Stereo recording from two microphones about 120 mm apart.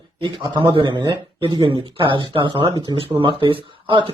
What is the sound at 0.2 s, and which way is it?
Speech, 45° right (ahead or behind).